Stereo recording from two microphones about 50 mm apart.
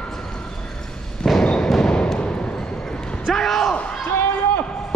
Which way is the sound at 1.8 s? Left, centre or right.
Centre.